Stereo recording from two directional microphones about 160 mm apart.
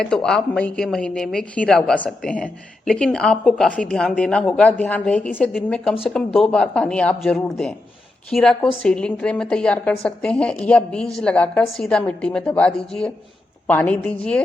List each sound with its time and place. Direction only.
0.0 s a woman's voice: 5° left (ahead or behind)